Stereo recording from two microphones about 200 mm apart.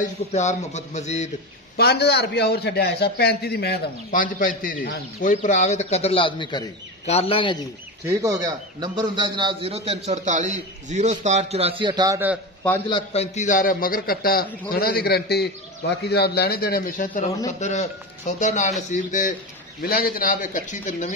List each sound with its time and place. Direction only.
0.0 s speech: 35° left (ahead or behind)
1.8 s a man's voice: 55° left (ahead or behind); by 7.5 s 30° left (ahead or behind)
8.2 s a man's voice: 20° right (ahead or behind)
12.9 s a man's voice: 30° left (ahead or behind)